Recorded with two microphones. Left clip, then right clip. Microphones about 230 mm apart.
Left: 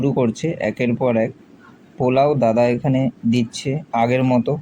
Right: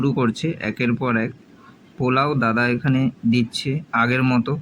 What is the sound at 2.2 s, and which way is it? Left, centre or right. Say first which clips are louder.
A man's voice: left 5 dB; centre.